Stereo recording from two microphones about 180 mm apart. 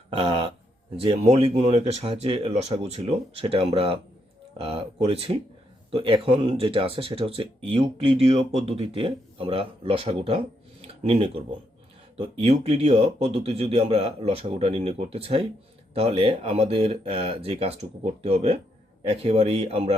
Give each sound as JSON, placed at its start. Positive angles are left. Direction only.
{"t": 0.1, "sound": "speech", "side_deg": -35}